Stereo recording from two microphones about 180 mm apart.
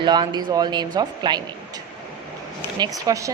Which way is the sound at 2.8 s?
20° right (ahead or behind).